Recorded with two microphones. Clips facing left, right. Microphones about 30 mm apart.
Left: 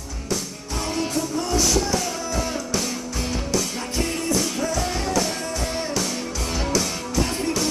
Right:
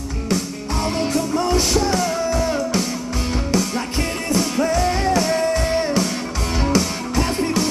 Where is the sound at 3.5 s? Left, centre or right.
Right.